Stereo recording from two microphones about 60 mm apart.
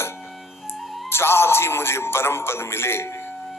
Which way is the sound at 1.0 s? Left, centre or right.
Left.